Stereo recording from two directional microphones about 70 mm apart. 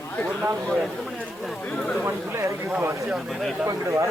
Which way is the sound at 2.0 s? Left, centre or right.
Right.